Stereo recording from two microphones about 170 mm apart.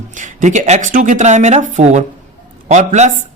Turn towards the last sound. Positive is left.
turn(degrees=-40)  # may be behind; listen again after turning